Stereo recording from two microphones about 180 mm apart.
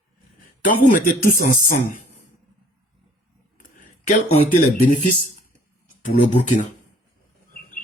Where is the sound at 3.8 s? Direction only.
45° left (ahead or behind).